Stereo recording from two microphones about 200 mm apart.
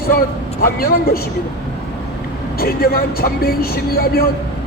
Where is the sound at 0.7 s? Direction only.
50° left (ahead or behind).